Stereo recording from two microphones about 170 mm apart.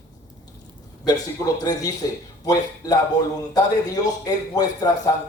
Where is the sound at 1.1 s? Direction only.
20° left (ahead or behind).